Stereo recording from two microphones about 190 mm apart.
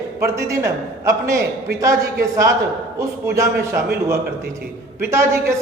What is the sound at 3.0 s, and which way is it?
Speech, 15° right (ahead or behind).